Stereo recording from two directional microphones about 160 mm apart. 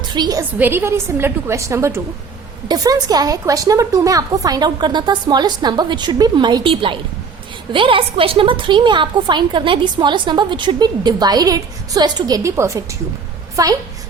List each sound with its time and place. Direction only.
0.0 s a woman's voice: 25° right (ahead or behind)
0.6 s a woman's voice: 15° right (ahead or behind)